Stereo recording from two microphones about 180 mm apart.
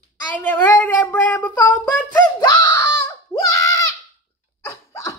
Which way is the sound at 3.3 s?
15° left (ahead or behind).